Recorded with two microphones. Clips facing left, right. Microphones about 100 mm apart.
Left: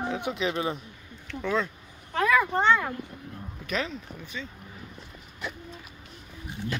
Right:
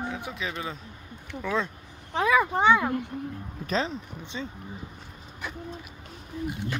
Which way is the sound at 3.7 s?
30° right (ahead or behind).